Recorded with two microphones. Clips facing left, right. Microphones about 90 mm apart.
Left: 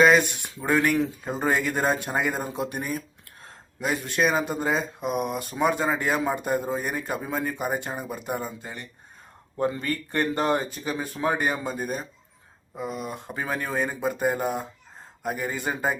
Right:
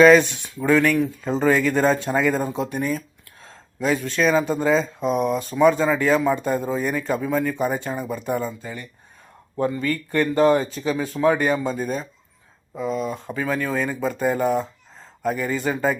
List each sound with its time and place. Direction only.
0.0 s speech: 15° left (ahead or behind)
9.8 s speech: 30° left (ahead or behind)